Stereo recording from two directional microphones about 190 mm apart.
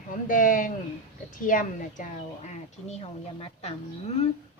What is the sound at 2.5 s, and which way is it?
A woman's voice, 35° left (ahead or behind).